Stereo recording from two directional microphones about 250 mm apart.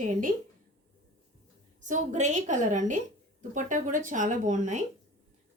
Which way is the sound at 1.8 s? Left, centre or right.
Right.